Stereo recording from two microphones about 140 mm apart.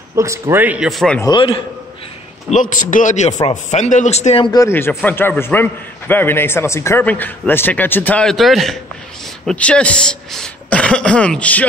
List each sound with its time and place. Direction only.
0.1 s speech: 20° right (ahead or behind); by 1.2 s 5° left (ahead or behind)
1.2 s a man's voice: 35° left (ahead or behind)
2.5 s a man's voice: 65° left (ahead or behind); by 4.5 s 50° left (ahead or behind)
4.5 s a man's voice: 20° left (ahead or behind)